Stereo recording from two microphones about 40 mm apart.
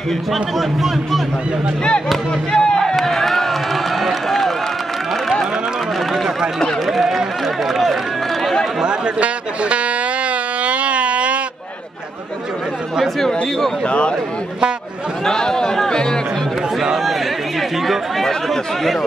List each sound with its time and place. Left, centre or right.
0.3 s speech: centre
2.5 s speech: left
2.8 s a sound: centre
6.9 s speech: centre
8.8 s speech: right
10.6 s a sound: right
13.8 s speech: left
15.2 s speech: centre
17.6 s speech: centre